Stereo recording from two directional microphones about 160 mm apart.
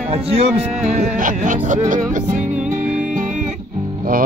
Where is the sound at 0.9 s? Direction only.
50° right (ahead or behind).